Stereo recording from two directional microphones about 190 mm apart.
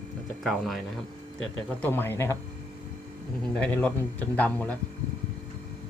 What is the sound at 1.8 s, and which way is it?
Speech, 10° left (ahead or behind).